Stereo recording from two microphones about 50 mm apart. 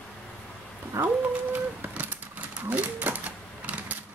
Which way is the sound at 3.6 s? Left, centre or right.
Right.